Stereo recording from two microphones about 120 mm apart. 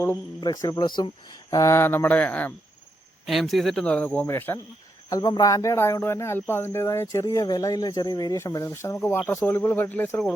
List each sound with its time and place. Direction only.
0.4 s speech: 30° left (ahead or behind); by 2.5 s 15° left (ahead or behind)
3.2 s speech: centre (ahead or behind); by 4.6 s 20° left (ahead or behind)
5.0 s speech: 35° left (ahead or behind); by 10.3 s 15° left (ahead or behind)